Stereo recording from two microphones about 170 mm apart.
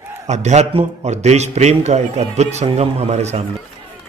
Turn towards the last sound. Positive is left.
turn(degrees=-40)  # may be behind; listen again after turning